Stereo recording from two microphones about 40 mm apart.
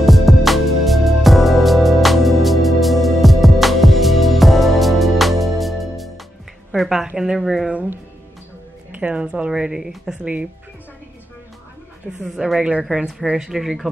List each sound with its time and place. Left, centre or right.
0.0 s music: centre
7.3 s speech: centre
9.0 s speech: right
10.1 s speech: right
12.3 s speech: centre
12.9 s speech: right
13.4 s speech: centre